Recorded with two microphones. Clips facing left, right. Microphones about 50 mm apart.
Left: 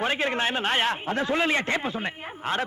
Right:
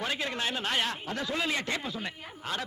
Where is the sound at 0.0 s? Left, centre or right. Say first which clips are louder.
Left 7 dB; left.